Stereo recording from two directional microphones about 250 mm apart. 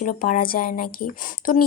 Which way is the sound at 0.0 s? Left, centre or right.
Left.